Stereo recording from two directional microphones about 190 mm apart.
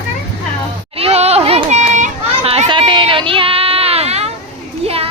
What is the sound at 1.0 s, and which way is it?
Children playing, 35° right (ahead or behind).